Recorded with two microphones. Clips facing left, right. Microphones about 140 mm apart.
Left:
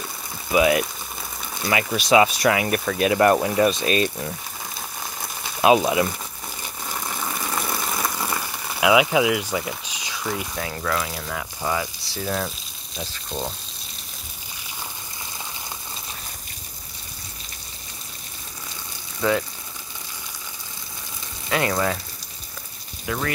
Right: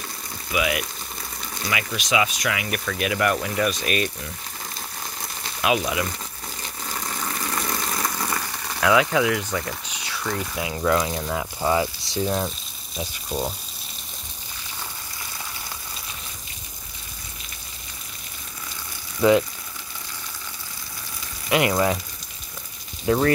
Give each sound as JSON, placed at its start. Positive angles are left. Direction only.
{"t": 0.5, "sound": "speech", "side_deg": 35}
{"t": 5.6, "sound": "speech", "side_deg": 30}
{"t": 6.6, "sound": "vehicle", "side_deg": 10}
{"t": 7.8, "sound": "a sound", "side_deg": 10}
{"t": 10.5, "sound": "speech", "side_deg": -10}
{"t": 12.4, "sound": "frying", "side_deg": 0}
{"t": 13.1, "sound": "speech", "side_deg": -5}
{"t": 19.2, "sound": "speech", "side_deg": -15}
{"t": 21.5, "sound": "speech", "side_deg": -20}
{"t": 23.0, "sound": "speech", "side_deg": -35}